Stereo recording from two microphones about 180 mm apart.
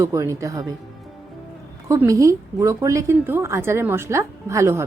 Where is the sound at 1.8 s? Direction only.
15° right (ahead or behind).